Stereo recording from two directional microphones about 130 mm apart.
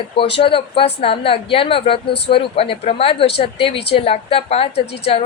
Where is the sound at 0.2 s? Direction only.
45° left (ahead or behind).